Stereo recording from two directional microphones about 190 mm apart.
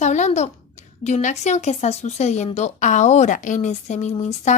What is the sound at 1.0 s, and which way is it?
Speech, 40° left (ahead or behind).